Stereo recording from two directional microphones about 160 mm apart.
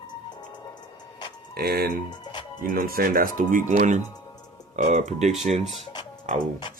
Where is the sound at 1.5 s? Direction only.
75° right (ahead or behind).